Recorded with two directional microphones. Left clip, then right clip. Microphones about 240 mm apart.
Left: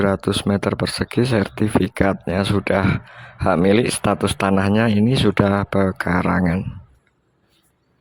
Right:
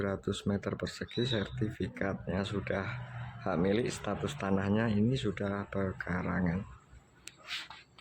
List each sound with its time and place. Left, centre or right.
0.0 s speech: left